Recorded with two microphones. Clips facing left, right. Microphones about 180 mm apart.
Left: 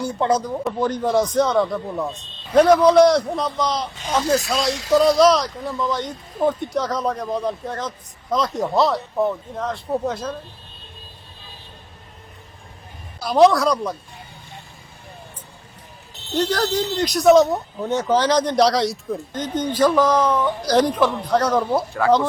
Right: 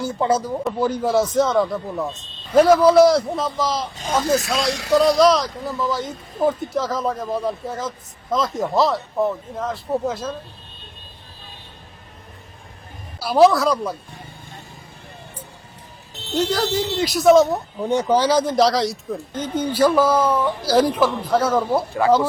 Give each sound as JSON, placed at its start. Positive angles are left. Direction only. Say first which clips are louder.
{"t": 0.0, "sound": "speech", "louder": "even", "side_deg": 0}
{"t": 4.0, "sound": "speech", "louder": "right 1 dB", "side_deg": -50}
{"t": 4.3, "sound": "speech", "louder": "left 1 dB", "side_deg": 0}
{"t": 13.1, "sound": "speech", "louder": "even", "side_deg": -5}
{"t": 16.3, "sound": "speech", "louder": "even", "side_deg": -5}
{"t": 17.7, "sound": "speech", "louder": "right 2 dB", "side_deg": -10}